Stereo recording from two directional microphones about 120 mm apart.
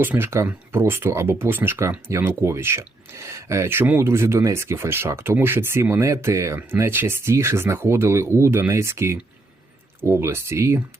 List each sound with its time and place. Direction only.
0.0 s speech: 20° right (ahead or behind)